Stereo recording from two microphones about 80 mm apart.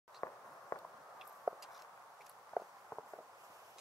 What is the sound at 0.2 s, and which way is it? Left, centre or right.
Walk, left.